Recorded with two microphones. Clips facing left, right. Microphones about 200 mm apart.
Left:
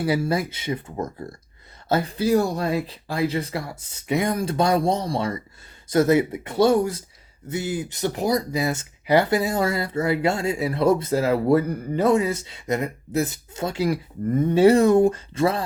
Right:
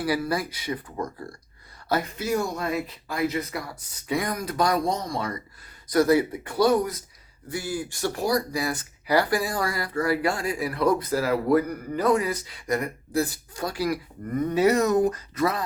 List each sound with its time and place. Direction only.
0.0 s speech: 25° left (ahead or behind)